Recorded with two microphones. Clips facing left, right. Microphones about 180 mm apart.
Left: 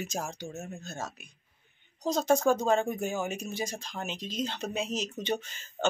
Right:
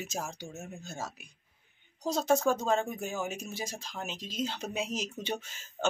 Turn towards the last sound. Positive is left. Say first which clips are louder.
# left 3 dB
turn(degrees=-5)  # may be behind; listen again after turning